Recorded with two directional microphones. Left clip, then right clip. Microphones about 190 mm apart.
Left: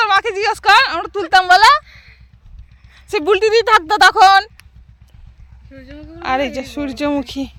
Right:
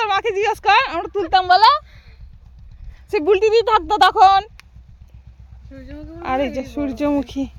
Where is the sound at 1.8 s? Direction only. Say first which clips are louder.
Left 8 dB; 40° right (ahead or behind).